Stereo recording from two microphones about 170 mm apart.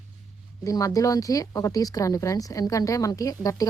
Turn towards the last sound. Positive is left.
turn(degrees=20)  # may be behind; listen again after turning